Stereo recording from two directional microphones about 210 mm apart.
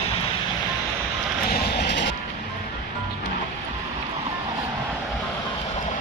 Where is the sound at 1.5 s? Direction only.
50° left (ahead or behind).